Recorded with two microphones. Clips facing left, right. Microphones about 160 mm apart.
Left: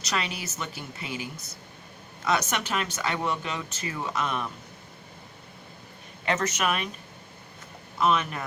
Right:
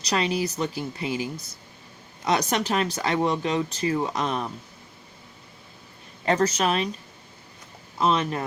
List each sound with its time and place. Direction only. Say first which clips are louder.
0.0 s speech: right 7 dB; 35° right (ahead or behind)
6.2 s speech: right 5 dB; 35° right (ahead or behind)
7.9 s speech: right 2 dB; 30° right (ahead or behind)